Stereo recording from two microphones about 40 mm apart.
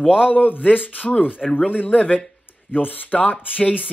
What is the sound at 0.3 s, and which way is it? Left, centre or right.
Speech, left.